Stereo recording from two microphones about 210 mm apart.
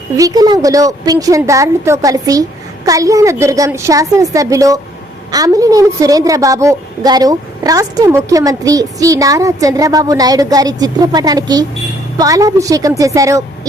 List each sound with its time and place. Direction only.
0.2 s a woman's voice: 15° right (ahead or behind)